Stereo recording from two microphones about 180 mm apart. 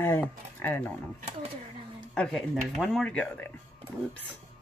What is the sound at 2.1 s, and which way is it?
Speech, centre (ahead or behind).